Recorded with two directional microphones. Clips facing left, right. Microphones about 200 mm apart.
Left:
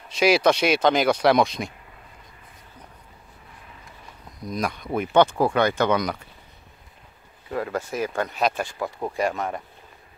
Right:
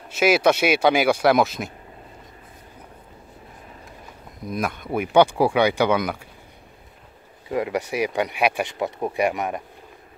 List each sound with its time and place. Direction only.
0.1 s speech: 5° right (ahead or behind)
4.5 s speech: 5° right (ahead or behind)
7.5 s speech: 15° right (ahead or behind)